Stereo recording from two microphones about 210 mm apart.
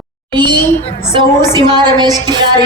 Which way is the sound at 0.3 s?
20° right (ahead or behind).